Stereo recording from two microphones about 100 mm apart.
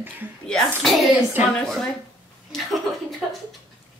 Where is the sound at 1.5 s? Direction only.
10° left (ahead or behind).